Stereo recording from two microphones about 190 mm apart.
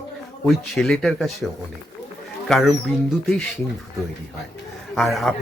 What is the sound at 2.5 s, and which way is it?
Speech, centre (ahead or behind).